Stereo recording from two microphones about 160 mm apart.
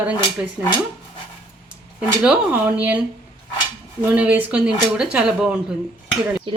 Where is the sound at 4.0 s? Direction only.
10° right (ahead or behind).